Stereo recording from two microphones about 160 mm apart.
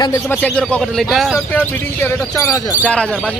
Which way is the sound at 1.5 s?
10° left (ahead or behind).